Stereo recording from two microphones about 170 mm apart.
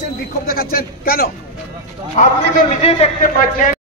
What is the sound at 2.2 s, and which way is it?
A man's voice, 45° left (ahead or behind).